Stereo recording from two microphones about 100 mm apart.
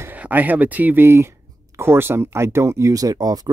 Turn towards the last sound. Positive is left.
turn(degrees=-40)  # may be behind; listen again after turning